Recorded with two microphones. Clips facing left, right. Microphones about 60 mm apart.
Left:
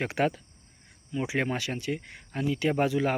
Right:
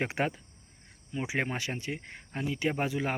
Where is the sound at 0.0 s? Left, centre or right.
Right.